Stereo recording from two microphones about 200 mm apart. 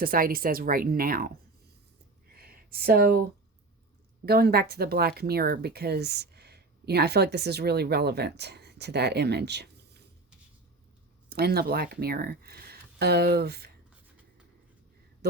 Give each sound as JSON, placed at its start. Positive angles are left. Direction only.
{"t": 0.0, "sound": "speech", "side_deg": -45}
{"t": 2.4, "sound": "a sound", "side_deg": -50}
{"t": 4.3, "sound": "speech", "side_deg": -50}
{"t": 11.3, "sound": "speech", "side_deg": -50}
{"t": 15.2, "sound": "speech", "side_deg": -55}